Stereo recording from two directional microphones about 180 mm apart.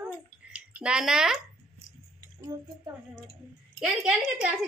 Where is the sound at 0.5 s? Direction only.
5° right (ahead or behind).